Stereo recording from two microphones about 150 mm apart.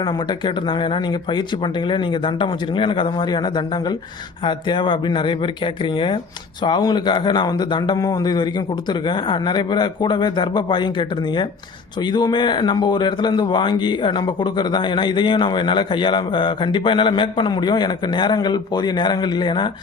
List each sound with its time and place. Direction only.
0.0 s speech: 30° left (ahead or behind)